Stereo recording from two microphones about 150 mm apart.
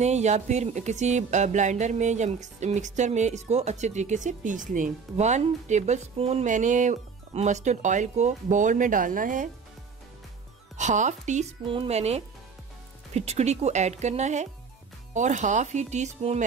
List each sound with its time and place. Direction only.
0.0 s speech: 50° right (ahead or behind)
10.8 s speech: 55° right (ahead or behind)
11.6 s speech: 35° right (ahead or behind)